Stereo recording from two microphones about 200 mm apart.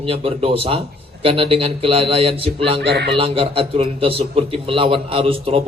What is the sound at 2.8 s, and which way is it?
Speech, 60° right (ahead or behind).